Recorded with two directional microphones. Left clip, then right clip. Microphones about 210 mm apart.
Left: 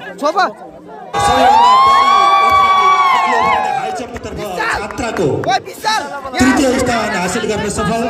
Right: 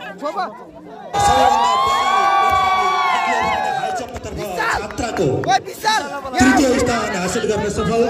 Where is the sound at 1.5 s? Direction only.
25° left (ahead or behind).